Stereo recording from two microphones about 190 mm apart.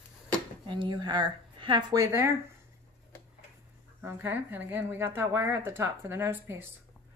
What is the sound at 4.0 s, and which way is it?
Speech, 10° right (ahead or behind).